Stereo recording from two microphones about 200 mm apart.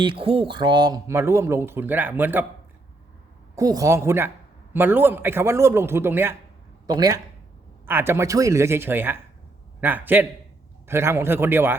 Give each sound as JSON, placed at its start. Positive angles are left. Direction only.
{"t": 0.0, "sound": "speech", "side_deg": -25}
{"t": 3.5, "sound": "speech", "side_deg": -15}